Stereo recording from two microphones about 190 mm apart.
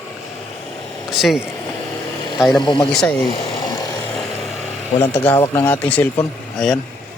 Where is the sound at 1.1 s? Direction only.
Centre (ahead or behind).